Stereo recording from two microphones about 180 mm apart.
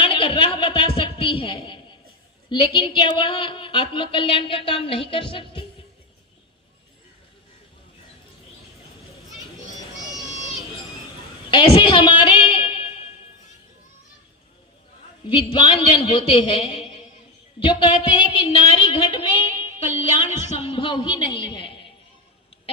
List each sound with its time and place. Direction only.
0.0 s a woman's voice: 30° left (ahead or behind)
11.5 s a sound: 30° left (ahead or behind)
15.3 s a woman's voice: 30° left (ahead or behind)